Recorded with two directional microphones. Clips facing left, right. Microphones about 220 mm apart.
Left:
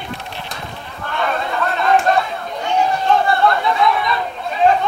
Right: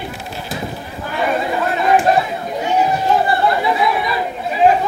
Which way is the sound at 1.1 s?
10° right (ahead or behind).